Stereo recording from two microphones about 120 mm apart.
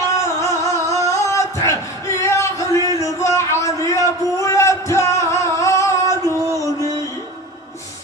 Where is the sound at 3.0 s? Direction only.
25° left (ahead or behind).